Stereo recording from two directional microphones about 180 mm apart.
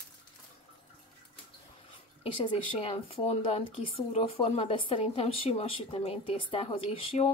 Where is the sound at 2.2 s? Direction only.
35° left (ahead or behind).